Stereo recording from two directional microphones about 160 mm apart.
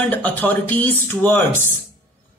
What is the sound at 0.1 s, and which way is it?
Speech, 10° left (ahead or behind).